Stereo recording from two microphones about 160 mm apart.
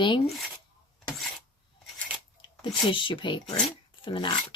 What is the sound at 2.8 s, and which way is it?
Speech, 30° left (ahead or behind).